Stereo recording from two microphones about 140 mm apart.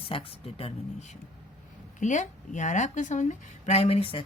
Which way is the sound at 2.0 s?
60° left (ahead or behind).